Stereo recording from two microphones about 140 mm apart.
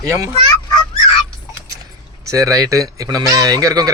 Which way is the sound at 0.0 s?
25° right (ahead or behind).